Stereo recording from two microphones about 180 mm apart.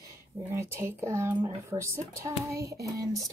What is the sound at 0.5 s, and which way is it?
A woman's voice, 15° right (ahead or behind).